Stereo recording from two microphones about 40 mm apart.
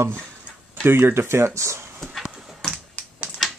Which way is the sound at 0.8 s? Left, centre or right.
Right.